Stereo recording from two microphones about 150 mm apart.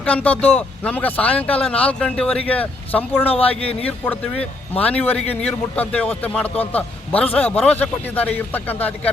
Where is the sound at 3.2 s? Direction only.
40° left (ahead or behind).